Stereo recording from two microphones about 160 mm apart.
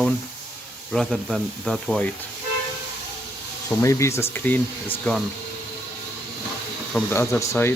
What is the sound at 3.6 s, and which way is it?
Speech, 20° left (ahead or behind).